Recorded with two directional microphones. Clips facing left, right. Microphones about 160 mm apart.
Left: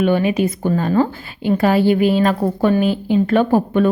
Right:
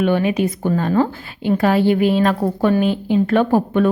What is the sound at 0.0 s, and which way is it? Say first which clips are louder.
Speech: left 1 dB; 5° left (ahead or behind).